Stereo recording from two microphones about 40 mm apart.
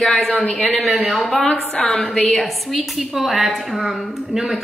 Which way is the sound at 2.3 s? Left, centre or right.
Centre.